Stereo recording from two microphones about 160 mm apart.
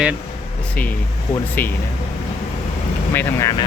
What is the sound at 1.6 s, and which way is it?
Speech, 10° left (ahead or behind).